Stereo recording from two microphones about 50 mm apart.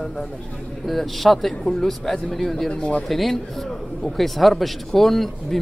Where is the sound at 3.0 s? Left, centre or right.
Centre.